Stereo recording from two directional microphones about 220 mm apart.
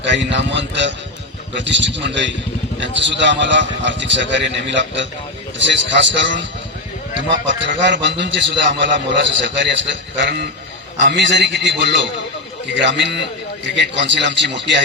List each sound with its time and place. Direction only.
0.1 s a man's voice: 55° right (ahead or behind)